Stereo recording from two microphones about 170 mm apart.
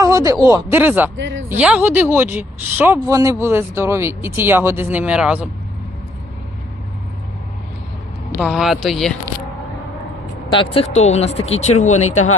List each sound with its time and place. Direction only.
0.0 s speech: 20° right (ahead or behind)
1.1 s speech: 90° right
1.5 s speech: 10° right (ahead or behind)
8.4 s speech: 5° right (ahead or behind)
10.5 s speech: 30° left (ahead or behind)